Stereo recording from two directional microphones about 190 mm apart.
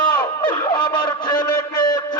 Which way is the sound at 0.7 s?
20° left (ahead or behind).